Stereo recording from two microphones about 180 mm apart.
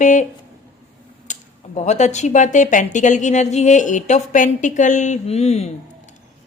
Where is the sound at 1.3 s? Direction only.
40° left (ahead or behind).